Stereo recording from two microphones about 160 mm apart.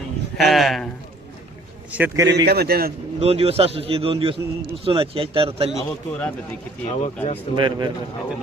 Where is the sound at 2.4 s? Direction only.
80° right.